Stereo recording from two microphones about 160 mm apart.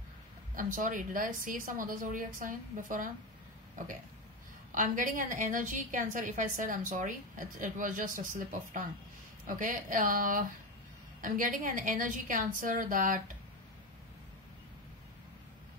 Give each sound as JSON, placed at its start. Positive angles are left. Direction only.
{"t": 0.6, "sound": "a woman's voice", "side_deg": -55}